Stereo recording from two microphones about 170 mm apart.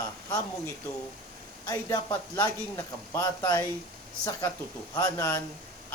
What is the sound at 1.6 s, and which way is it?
Speech, 20° left (ahead or behind).